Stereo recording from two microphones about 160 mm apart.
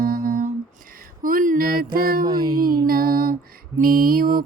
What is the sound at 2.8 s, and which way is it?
Music, 65° right (ahead or behind).